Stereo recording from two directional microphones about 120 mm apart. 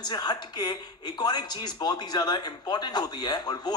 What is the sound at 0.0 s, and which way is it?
A man's voice, 35° left (ahead or behind).